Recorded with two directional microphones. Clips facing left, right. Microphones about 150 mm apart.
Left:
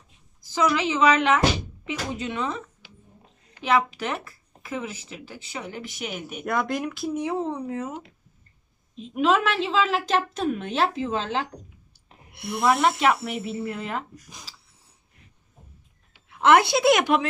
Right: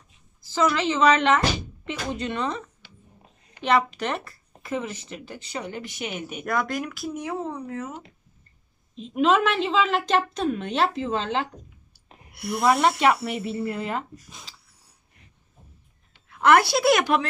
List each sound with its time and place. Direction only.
0.5 s a woman's voice: 10° left (ahead or behind)
6.7 s speech: 25° left (ahead or behind)
8.9 s speech: 5° left (ahead or behind)
11.9 s clicking: 25° left (ahead or behind)
12.6 s speech: centre (ahead or behind)
16.3 s a woman's voice: 20° left (ahead or behind)